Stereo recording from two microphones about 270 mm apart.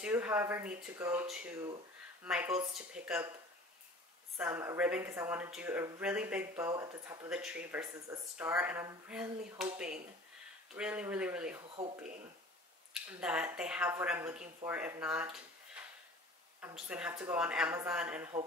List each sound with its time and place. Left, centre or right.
0.0 s a woman's voice: centre
4.4 s speech: centre
10.7 s a woman's voice: centre
11.6 s speech: right
12.9 s a woman's voice: centre
16.6 s a woman's voice: centre